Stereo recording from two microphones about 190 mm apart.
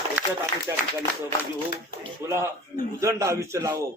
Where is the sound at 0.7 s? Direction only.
15° right (ahead or behind).